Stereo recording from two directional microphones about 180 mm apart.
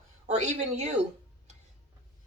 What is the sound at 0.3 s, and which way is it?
Speech, 40° right (ahead or behind).